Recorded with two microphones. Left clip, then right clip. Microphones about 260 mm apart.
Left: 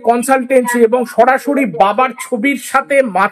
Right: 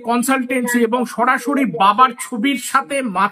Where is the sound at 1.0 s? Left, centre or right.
Left.